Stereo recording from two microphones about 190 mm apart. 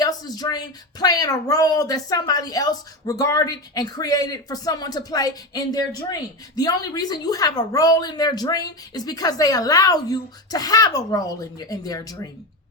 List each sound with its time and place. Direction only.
0.0 s speech: 20° left (ahead or behind)